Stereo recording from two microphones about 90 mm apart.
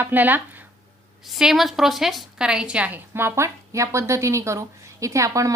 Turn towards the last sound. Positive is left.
turn(degrees=-35)  # may be behind; listen again after turning